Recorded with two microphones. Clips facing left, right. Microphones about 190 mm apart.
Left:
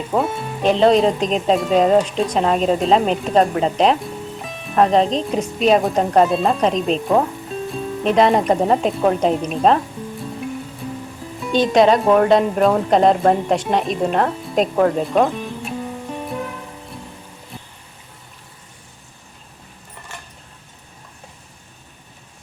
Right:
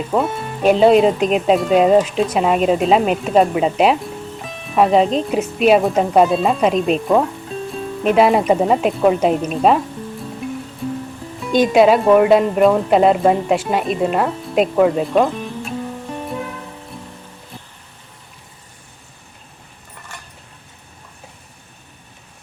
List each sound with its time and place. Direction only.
0.1 s speech: centre (ahead or behind)
10.8 s music: centre (ahead or behind)
11.5 s speech: 10° right (ahead or behind)